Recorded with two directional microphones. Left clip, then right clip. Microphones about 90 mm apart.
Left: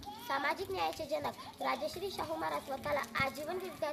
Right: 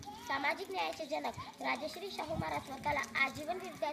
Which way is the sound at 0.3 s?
40° left (ahead or behind).